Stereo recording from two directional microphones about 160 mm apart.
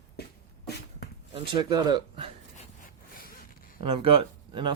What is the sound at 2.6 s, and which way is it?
Zipper, 60° left (ahead or behind).